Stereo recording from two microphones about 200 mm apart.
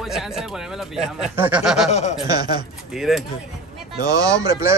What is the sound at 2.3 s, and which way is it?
Speech, 20° right (ahead or behind).